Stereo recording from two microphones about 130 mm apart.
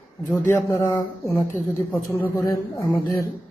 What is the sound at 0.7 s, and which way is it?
Speech, 20° left (ahead or behind).